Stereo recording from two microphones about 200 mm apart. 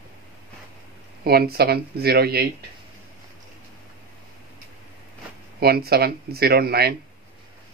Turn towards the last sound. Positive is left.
turn(degrees=-50)  # may be behind; listen again after turning